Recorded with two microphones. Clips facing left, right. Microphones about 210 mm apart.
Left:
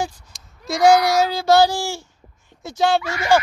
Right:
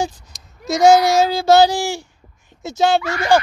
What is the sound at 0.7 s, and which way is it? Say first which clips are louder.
Speech: right 3 dB; 25° right (ahead or behind).